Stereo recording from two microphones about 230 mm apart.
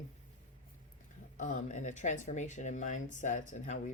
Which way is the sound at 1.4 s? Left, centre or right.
Left.